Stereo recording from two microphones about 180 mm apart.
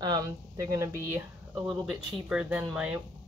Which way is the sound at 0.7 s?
15° right (ahead or behind).